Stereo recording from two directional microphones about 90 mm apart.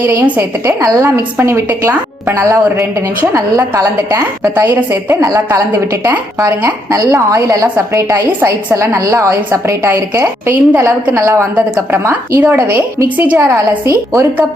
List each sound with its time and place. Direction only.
0.0 s a woman's voice: 25° right (ahead or behind)
0.8 s a woman's voice: 40° right (ahead or behind)
1.0 s a woman's voice: 30° right (ahead or behind)
3.3 s a woman's voice: 35° right (ahead or behind)
6.9 s a woman's voice: 40° right (ahead or behind); by 10.8 s 25° right (ahead or behind)
10.8 s a woman's voice: 35° right (ahead or behind)
13.1 s a woman's voice: 15° right (ahead or behind)